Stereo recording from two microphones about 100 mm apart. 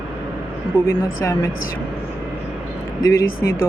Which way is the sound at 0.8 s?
30° left (ahead or behind).